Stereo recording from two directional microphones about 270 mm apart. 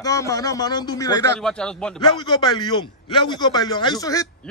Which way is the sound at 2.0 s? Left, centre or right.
Centre.